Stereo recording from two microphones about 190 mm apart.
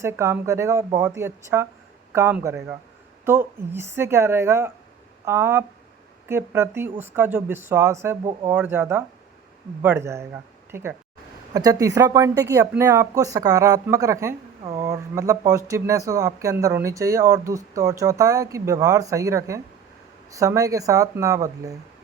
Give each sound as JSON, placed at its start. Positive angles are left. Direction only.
{"t": 0.0, "sound": "speech", "side_deg": -15}